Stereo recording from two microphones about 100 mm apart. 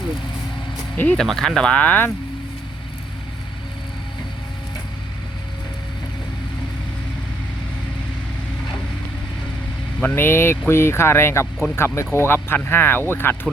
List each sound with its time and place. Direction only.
0.9 s speech: 15° left (ahead or behind)
1.2 s speech: 5° left (ahead or behind)
10.0 s speech: 20° left (ahead or behind)